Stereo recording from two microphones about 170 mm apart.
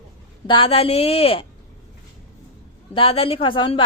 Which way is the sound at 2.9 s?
35° left (ahead or behind).